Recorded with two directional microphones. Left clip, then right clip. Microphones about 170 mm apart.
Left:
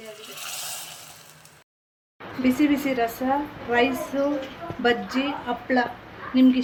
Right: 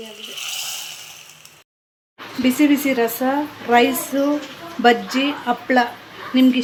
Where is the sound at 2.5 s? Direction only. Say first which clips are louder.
Right 7 dB; 65° right (ahead or behind).